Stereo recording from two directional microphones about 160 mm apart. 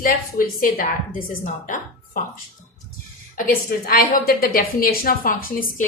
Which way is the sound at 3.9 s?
65° left (ahead or behind).